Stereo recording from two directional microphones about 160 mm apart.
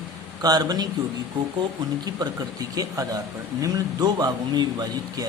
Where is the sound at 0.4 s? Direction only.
25° right (ahead or behind).